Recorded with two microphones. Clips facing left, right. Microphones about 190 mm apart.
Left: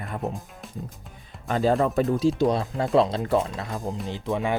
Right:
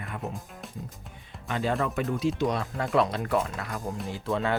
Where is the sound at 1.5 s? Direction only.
35° left (ahead or behind); by 4.5 s 15° left (ahead or behind).